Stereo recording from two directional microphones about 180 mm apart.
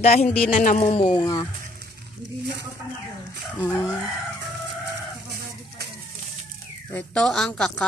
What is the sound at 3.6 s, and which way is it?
Speech, 10° left (ahead or behind).